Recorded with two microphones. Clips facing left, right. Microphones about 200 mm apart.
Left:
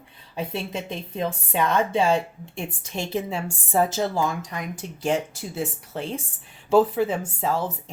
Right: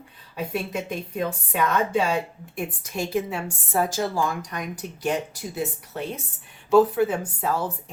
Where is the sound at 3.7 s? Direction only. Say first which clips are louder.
Left 2 dB; 25° left (ahead or behind).